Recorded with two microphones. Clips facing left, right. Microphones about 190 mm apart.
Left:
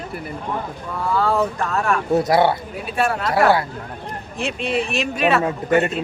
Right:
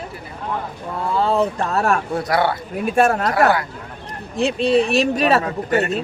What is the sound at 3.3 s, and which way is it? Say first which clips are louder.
Speech: left 1 dB; 25° left (ahead or behind).